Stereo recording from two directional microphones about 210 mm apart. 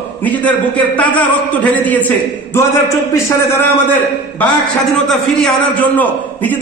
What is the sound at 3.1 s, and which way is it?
Speech, 10° left (ahead or behind).